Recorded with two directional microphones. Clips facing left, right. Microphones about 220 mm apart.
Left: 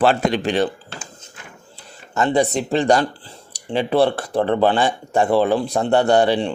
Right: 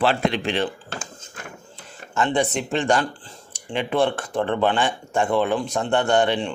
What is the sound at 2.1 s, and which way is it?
Speech, 40° left (ahead or behind).